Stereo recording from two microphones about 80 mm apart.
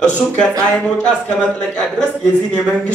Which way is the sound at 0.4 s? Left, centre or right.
Centre.